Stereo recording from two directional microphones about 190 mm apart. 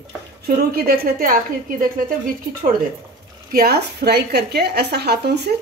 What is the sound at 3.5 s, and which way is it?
A woman's voice, 55° right (ahead or behind).